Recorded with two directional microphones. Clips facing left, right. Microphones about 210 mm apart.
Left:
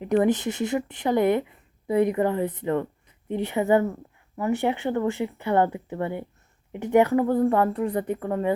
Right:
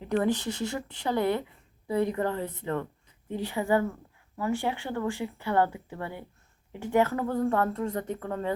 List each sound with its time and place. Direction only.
0.0 s speech: 20° left (ahead or behind)